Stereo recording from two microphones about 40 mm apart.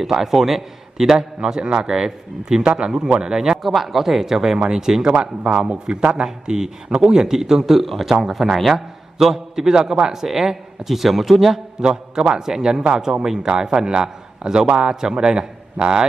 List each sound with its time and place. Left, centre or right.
0.0 s a man's voice: centre
3.6 s a man's voice: centre
5.1 s a man's voice: right; by 11.6 s centre
11.8 s a man's voice: right